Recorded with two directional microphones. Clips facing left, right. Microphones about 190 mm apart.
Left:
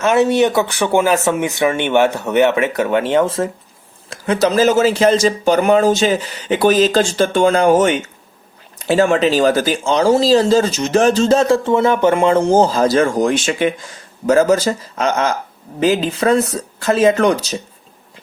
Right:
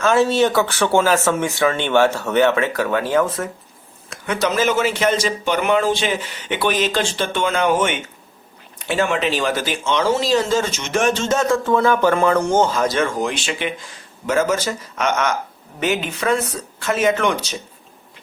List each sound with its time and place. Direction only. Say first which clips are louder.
0.0 s speech: left 3 dB; 20° left (ahead or behind); by 17.6 s 35° left (ahead or behind)